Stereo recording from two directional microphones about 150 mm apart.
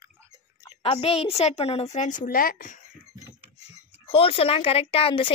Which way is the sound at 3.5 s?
40° left (ahead or behind).